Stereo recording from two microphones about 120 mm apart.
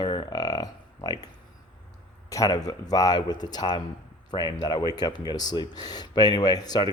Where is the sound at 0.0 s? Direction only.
45° left (ahead or behind).